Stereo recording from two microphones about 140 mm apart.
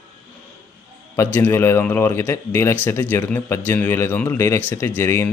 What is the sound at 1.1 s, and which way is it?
Speech, 15° left (ahead or behind).